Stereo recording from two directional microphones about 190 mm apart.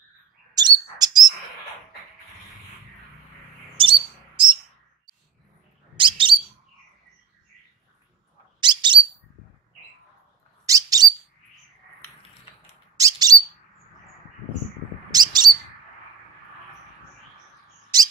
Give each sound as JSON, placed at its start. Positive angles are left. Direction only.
{"t": 0.6, "sound": "bird", "side_deg": -20}
{"t": 3.7, "sound": "bird", "side_deg": -25}
{"t": 5.9, "sound": "bird", "side_deg": -25}
{"t": 8.5, "sound": "bird", "side_deg": -25}
{"t": 10.6, "sound": "bird", "side_deg": -20}
{"t": 13.3, "sound": "bird", "side_deg": -20}
{"t": 15.0, "sound": "bird", "side_deg": -20}